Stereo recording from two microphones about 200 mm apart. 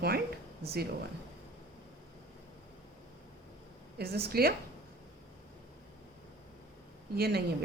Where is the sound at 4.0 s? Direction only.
55° right (ahead or behind).